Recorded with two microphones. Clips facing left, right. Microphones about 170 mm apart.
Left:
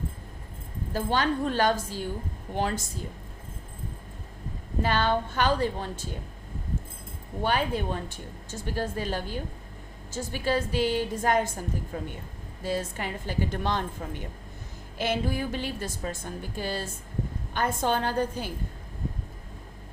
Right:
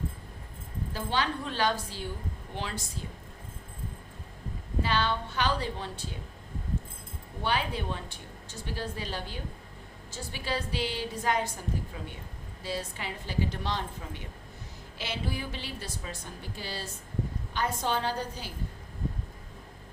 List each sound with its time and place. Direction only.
0.9 s a woman's voice: 45° left (ahead or behind)
4.8 s a woman's voice: 50° left (ahead or behind)
7.4 s a woman's voice: 45° left (ahead or behind)